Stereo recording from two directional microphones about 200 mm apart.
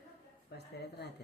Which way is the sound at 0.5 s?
55° left (ahead or behind).